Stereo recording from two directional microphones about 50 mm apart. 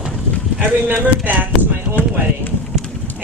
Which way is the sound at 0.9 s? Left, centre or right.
Right.